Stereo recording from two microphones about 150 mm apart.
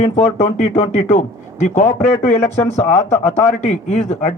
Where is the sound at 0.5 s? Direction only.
50° left (ahead or behind).